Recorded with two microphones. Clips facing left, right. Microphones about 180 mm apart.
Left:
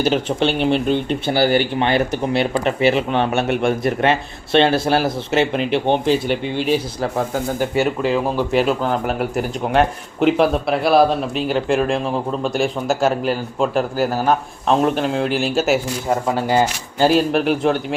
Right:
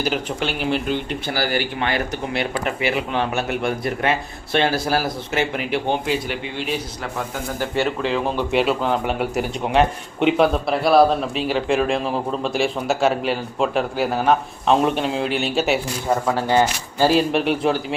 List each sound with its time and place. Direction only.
0.0 s speech: 25° left (ahead or behind)
6.2 s speech: centre (ahead or behind)
17.1 s speech: centre (ahead or behind)